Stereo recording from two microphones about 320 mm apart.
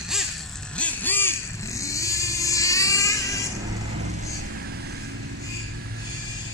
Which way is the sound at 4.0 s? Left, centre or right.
Right.